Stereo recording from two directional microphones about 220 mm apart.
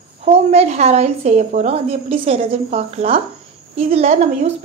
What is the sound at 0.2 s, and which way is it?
A woman's voice, 30° right (ahead or behind).